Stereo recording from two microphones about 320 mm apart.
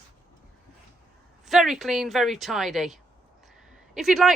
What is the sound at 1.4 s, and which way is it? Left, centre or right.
Speech, centre.